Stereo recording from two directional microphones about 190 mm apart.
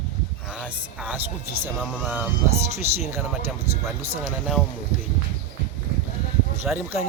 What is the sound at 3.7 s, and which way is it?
Speech, 30° right (ahead or behind).